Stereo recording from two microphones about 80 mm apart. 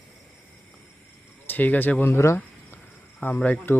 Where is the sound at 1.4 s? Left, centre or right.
Left.